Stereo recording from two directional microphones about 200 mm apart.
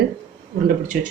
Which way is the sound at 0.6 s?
40° right (ahead or behind).